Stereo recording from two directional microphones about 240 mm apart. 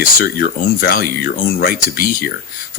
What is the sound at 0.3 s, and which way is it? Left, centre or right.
Speech, left.